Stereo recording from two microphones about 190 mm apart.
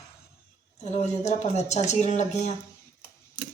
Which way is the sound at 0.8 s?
35° left (ahead or behind).